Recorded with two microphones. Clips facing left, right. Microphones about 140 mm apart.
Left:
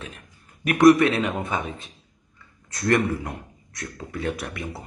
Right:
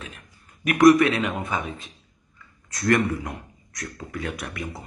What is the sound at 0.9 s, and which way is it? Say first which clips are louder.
Speech: even; 25° left (ahead or behind).